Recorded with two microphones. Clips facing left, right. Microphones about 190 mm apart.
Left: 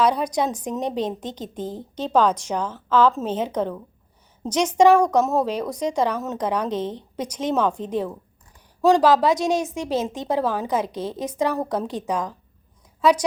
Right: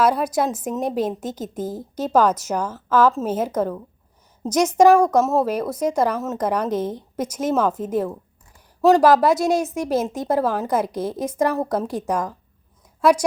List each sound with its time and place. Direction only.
0.0 s a woman's voice: 5° right (ahead or behind)